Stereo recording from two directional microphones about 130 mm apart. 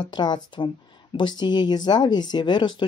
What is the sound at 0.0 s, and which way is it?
Speech, 35° left (ahead or behind).